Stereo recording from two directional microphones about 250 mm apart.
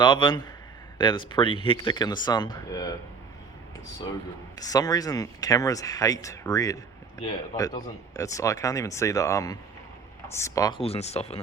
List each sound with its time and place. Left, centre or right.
0.0 s speech: centre
4.6 s speech: centre